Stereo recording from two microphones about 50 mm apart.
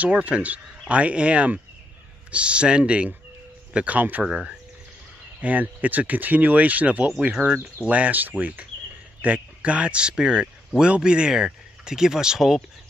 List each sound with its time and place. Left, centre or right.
0.1 s speech: right
4.2 s speech: centre
5.4 s speech: right; by 12.5 s centre